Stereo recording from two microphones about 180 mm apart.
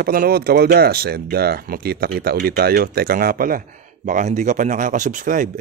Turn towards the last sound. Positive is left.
turn(degrees=-45)  # may be behind; listen again after turning